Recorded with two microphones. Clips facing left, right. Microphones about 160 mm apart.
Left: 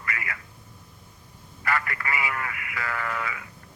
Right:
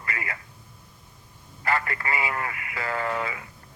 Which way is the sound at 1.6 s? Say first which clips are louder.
Right 2 dB; 25° right (ahead or behind).